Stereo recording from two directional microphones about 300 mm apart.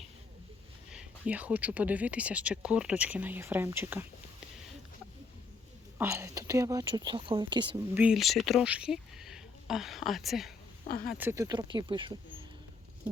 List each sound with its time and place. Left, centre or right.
0.9 s speech: centre
6.0 s speech: centre
8.0 s speech: centre
10.8 s speech: left
11.1 s speech: centre